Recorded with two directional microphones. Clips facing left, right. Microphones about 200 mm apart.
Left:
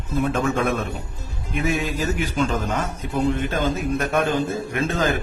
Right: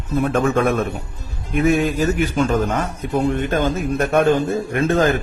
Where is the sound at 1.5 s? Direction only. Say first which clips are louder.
Right 7 dB; 55° right (ahead or behind).